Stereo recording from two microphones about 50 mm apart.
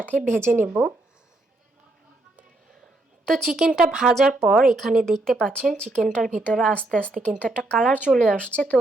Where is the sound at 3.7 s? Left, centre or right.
Centre.